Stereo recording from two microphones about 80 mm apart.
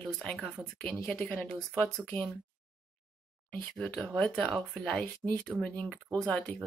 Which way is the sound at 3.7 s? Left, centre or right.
Centre.